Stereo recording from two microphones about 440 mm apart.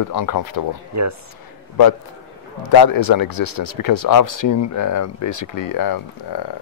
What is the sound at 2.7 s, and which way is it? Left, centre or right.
Speech, left.